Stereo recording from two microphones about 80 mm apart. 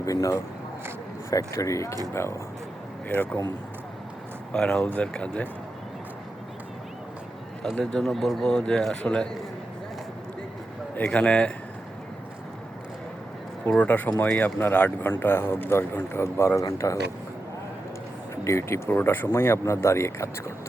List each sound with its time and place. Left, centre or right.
0.0 s speech: left
3.1 s speech: right
4.5 s a man's voice: centre
7.8 s a man's voice: centre
11.1 s a man's voice: centre
13.7 s speech: left
18.4 s speech: left